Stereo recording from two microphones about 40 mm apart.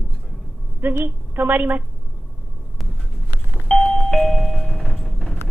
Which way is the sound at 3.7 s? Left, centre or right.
Centre.